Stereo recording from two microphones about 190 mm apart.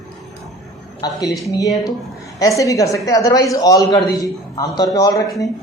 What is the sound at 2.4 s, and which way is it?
Speech, 15° left (ahead or behind).